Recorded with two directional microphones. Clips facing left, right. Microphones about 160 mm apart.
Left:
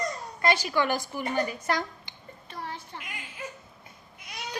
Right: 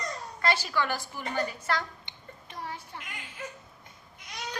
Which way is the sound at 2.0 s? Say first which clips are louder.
Left 1 dB; 15° right (ahead or behind).